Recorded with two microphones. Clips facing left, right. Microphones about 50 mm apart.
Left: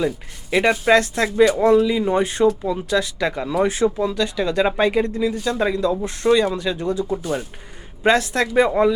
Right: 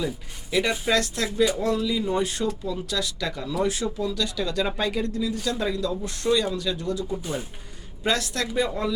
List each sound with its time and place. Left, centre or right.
0.5 s speech: left